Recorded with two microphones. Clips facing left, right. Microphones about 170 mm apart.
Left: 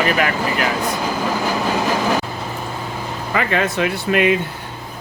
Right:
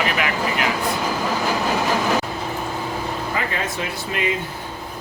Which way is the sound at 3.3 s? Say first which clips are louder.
Left 6 dB; 75° left (ahead or behind).